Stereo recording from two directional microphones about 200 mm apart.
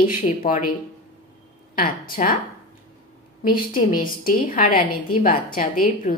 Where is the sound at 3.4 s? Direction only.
45° left (ahead or behind).